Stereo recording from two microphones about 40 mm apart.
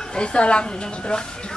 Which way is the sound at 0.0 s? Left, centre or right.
Left.